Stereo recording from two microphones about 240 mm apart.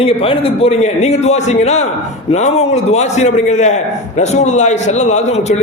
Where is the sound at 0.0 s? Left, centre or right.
Left.